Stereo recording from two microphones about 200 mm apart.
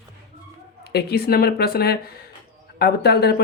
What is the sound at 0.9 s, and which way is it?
Speech, 50° left (ahead or behind).